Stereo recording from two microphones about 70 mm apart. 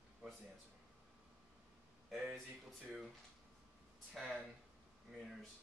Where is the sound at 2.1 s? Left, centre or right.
Centre.